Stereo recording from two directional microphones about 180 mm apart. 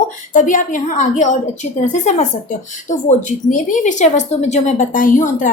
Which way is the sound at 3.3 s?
45° left (ahead or behind).